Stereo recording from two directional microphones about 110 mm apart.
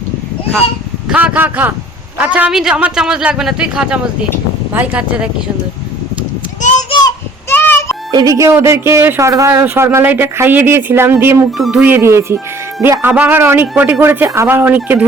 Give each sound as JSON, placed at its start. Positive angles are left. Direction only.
{"t": 1.1, "sound": "a man's voice", "side_deg": -10}
{"t": 6.6, "sound": "a sound", "side_deg": 90}
{"t": 7.5, "sound": "music", "side_deg": 20}
{"t": 8.1, "sound": "speech", "side_deg": -35}
{"t": 9.5, "sound": "a man's voice", "side_deg": -15}